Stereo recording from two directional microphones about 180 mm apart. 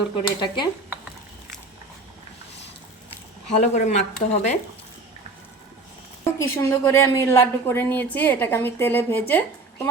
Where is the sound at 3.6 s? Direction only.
40° left (ahead or behind).